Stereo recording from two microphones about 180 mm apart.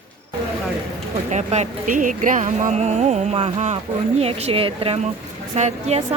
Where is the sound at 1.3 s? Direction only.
40° right (ahead or behind).